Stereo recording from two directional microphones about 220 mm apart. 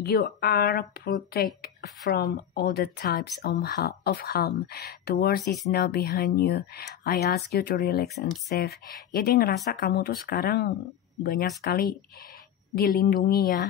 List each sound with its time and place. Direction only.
0.0 s speech: 45° left (ahead or behind)